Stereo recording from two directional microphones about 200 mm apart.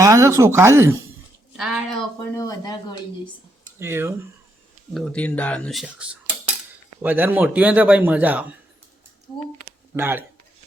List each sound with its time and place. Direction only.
0.0 s a man's voice: 15° right (ahead or behind)
1.5 s a woman's voice: centre (ahead or behind)
2.3 s speech: 15° left (ahead or behind)
3.8 s a man's voice: 10° right (ahead or behind)
4.9 s a man's voice: 5° left (ahead or behind)
9.9 s a man's voice: 10° right (ahead or behind)